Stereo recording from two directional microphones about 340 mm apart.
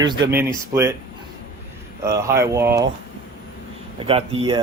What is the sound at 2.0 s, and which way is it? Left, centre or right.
Speech, centre.